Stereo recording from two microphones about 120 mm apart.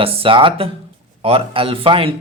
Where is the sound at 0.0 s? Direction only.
50° right (ahead or behind).